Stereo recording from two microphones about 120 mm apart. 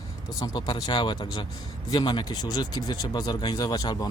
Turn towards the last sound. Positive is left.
turn(degrees=30)  # may be behind; listen again after turning